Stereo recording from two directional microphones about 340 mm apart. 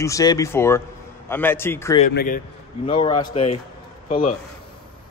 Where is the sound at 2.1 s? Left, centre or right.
Left.